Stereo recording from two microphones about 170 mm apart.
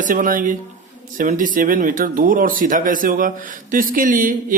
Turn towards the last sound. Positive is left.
turn(degrees=-55)  # may be behind; listen again after turning